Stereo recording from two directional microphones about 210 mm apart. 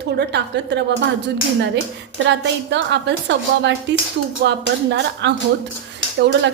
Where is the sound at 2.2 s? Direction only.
60° right (ahead or behind).